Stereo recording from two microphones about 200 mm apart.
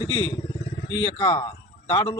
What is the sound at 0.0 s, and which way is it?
A man's voice, 20° left (ahead or behind).